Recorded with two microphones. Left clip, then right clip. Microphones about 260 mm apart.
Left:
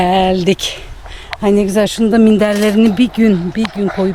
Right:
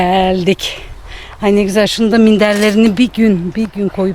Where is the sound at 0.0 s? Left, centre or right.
Centre.